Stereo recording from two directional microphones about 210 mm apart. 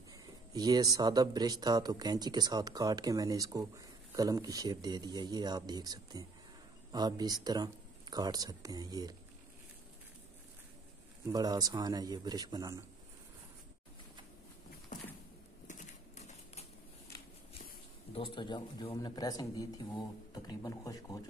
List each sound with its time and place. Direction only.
0.6 s speech: 20° right (ahead or behind)
11.2 s speech: 20° right (ahead or behind)
15.6 s typewriter: 35° left (ahead or behind)
18.1 s speech: 25° left (ahead or behind)